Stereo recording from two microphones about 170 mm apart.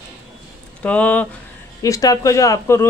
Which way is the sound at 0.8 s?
10° left (ahead or behind).